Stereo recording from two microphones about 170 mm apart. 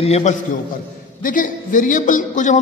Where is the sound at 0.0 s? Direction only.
40° left (ahead or behind).